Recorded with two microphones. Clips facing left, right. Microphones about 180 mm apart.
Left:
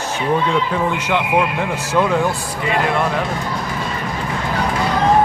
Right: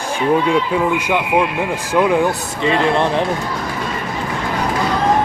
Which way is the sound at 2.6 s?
25° right (ahead or behind).